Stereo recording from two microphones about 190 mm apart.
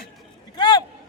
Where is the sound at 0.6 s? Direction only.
25° left (ahead or behind).